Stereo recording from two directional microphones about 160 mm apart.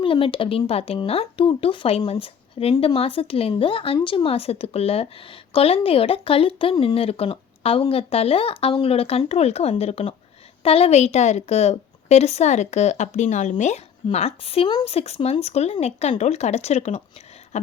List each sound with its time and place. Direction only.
0.0 s a woman's voice: 35° left (ahead or behind)